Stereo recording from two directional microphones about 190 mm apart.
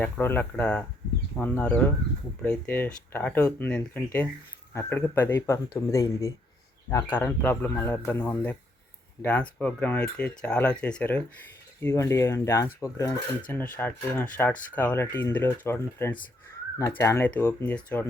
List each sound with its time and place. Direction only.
0.0 s speech: 10° left (ahead or behind)